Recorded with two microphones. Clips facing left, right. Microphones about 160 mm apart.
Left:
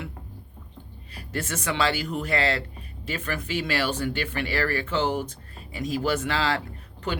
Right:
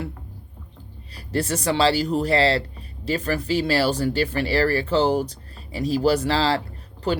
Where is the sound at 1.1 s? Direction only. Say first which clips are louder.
Right 7 dB; 35° right (ahead or behind).